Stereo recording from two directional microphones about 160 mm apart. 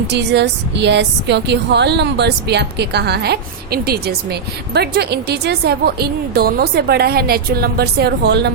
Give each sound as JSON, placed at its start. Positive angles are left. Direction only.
{"t": 0.1, "sound": "a woman's voice", "side_deg": -90}